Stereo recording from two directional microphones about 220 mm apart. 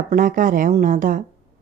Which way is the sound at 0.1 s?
40° right (ahead or behind).